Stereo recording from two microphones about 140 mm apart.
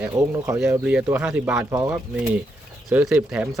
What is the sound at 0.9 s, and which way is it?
Speech, 10° right (ahead or behind).